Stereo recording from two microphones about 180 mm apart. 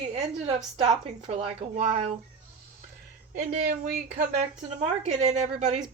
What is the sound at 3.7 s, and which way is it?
Speech, 60° right (ahead or behind).